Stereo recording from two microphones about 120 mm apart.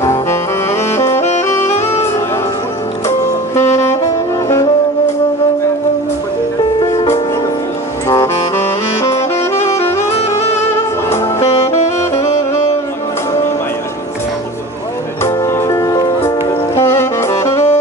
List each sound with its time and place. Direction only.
0.0 s saxophone: 25° left (ahead or behind)
3.1 s saxophone: 20° left (ahead or behind)
8.1 s saxophone: 25° left (ahead or behind)
11.1 s music: 20° left (ahead or behind)
11.5 s saxophone: 65° left (ahead or behind)
15.2 s music: 25° left (ahead or behind)